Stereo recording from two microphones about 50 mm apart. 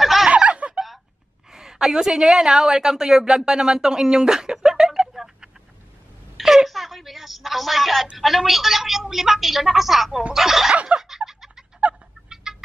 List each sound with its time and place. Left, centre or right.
0.0 s snicker: centre
0.3 s snicker: right
1.5 s a woman's voice: centre
6.3 s a sound: centre
8.2 s a woman's voice: centre
10.7 s a sound: right
11.0 s a sound: centre
11.9 s fowl: right
12.3 s chicken: centre